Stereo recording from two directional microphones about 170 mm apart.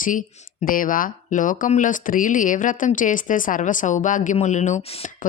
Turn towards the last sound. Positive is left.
turn(degrees=35)  # may be behind; listen again after turning